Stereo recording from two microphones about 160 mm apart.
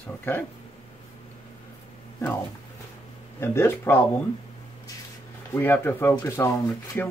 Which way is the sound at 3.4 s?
15° left (ahead or behind).